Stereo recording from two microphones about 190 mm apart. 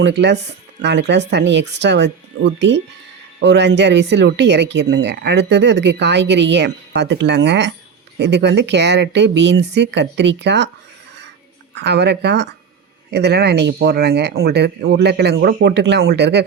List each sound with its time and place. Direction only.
0.0 s speech: 65° right (ahead or behind)
11.7 s speech: 65° right (ahead or behind)